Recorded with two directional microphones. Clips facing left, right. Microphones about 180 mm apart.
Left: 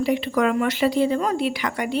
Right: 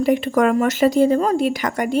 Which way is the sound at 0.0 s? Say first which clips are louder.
Right 4 dB; 45° right (ahead or behind).